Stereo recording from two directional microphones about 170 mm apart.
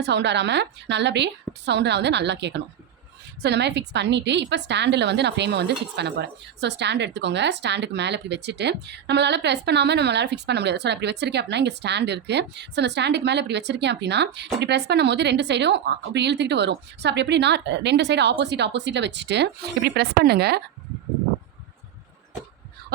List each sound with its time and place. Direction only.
0.0 s a woman's voice: 90° right; by 20.6 s 70° right (ahead or behind)